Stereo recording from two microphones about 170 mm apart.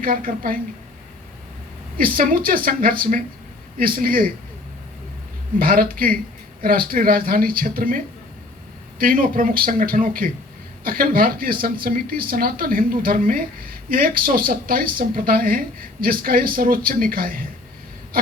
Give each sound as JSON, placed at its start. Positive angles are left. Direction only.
{"t": 0.0, "sound": "speech", "side_deg": -55}
{"t": 2.0, "sound": "speech", "side_deg": -55}
{"t": 5.5, "sound": "speech", "side_deg": -55}